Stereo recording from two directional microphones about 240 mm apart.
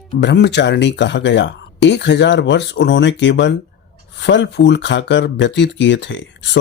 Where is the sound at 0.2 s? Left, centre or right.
Left.